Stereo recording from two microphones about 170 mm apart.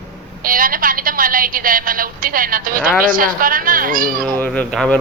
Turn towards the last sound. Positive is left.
turn(degrees=5)  # may be behind; listen again after turning